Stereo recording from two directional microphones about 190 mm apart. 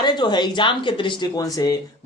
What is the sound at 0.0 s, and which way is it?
Speech, 20° left (ahead or behind).